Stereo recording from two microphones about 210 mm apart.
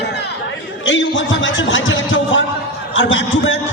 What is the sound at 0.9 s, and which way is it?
A man's voice, 60° left (ahead or behind).